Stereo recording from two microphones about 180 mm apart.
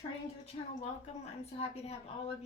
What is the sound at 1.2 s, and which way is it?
Speech, 35° left (ahead or behind).